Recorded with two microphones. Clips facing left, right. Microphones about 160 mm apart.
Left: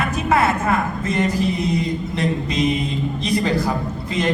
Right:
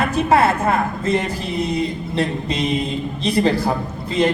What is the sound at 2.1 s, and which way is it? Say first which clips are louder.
A man's voice: right 1 dB; 30° right (ahead or behind).